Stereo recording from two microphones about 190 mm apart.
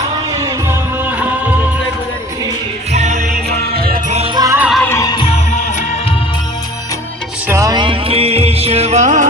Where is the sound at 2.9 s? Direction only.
35° right (ahead or behind).